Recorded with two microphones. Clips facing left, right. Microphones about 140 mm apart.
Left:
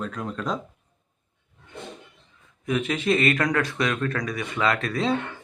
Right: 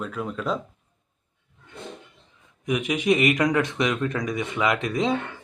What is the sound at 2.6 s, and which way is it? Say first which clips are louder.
Speech: right 2 dB; 15° right (ahead or behind).